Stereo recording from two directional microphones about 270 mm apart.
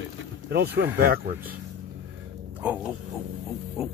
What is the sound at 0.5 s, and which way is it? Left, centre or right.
Speech, right.